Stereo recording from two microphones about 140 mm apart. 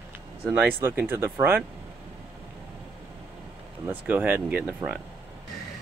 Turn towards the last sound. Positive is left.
turn(degrees=-10)  # may be behind; listen again after turning